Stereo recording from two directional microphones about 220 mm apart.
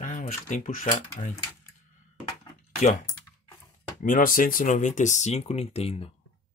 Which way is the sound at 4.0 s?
40° left (ahead or behind).